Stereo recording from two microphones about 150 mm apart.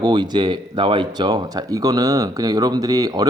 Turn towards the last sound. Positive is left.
turn(degrees=-25)  # may be behind; listen again after turning